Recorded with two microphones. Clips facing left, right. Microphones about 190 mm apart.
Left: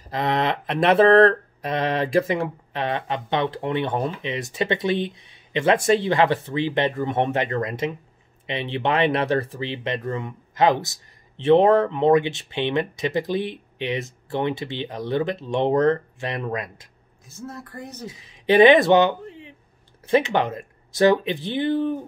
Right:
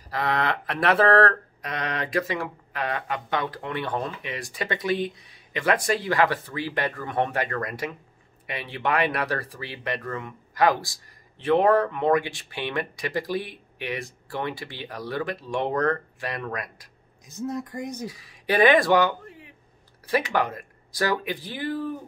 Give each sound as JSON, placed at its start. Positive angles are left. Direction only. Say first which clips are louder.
{"t": 0.1, "sound": "speech", "louder": "left 3 dB", "side_deg": 20}
{"t": 17.3, "sound": "speech", "louder": "right 6 dB", "side_deg": -15}
{"t": 18.0, "sound": "speech", "louder": "left 5 dB", "side_deg": 20}